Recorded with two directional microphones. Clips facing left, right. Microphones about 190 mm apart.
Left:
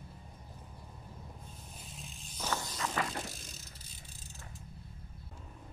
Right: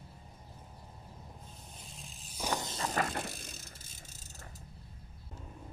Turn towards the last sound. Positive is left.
turn(degrees=-40)  # may be behind; listen again after turning